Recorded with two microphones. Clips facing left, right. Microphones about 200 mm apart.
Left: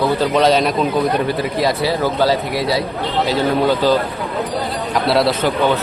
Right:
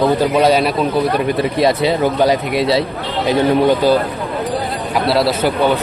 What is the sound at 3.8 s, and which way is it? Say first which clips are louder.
Speech: right 1 dB; 10° right (ahead or behind).